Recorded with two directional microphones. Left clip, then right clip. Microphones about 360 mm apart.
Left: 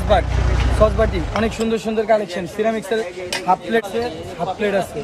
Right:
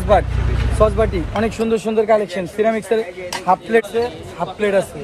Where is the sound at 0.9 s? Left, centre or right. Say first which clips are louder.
Right 1 dB; centre.